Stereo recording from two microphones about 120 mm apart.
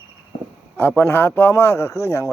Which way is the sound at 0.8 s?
15° left (ahead or behind).